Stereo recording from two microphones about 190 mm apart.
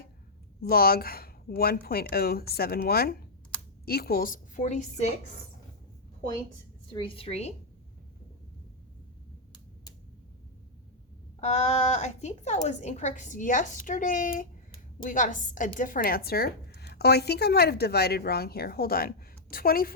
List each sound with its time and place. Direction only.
0.6 s speech: 55° left (ahead or behind); by 5.1 s 40° left (ahead or behind)
6.9 s a woman's voice: 30° left (ahead or behind)
11.3 s a woman's voice: 35° left (ahead or behind)